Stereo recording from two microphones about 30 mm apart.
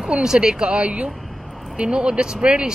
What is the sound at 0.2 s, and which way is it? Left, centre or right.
Speech, right.